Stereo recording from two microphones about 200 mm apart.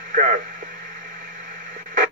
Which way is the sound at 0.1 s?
40° right (ahead or behind).